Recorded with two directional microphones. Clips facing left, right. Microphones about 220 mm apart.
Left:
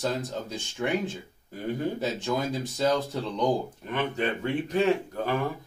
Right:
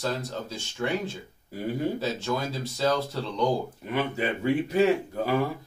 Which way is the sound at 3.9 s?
5° right (ahead or behind).